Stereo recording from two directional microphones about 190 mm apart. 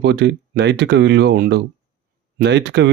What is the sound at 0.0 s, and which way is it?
Speech, 65° right (ahead or behind).